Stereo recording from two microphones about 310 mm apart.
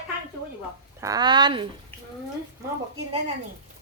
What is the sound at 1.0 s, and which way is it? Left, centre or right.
Speech, centre.